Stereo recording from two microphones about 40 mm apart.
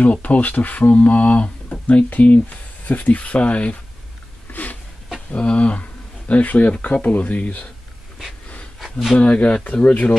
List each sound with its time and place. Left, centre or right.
0.0 s speech: left
4.5 s a sound: left
5.3 s speech: left
9.1 s speech: left